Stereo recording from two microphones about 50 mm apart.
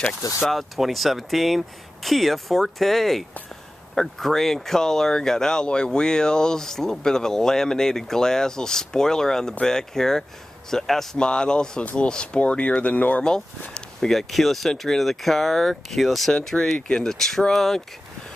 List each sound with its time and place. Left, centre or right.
0.5 s speech: centre
11.8 s speech: left
12.1 s speech: centre
14.1 s speech: centre
16.8 s speech: centre